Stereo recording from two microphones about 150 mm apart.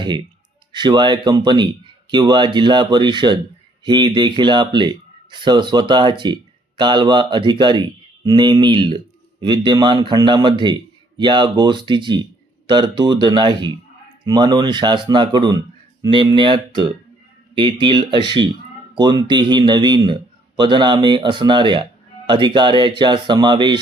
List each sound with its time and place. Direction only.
0.7 s a man's voice: 30° right (ahead or behind)